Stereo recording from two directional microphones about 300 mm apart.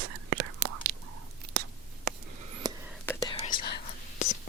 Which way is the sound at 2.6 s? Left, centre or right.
Centre.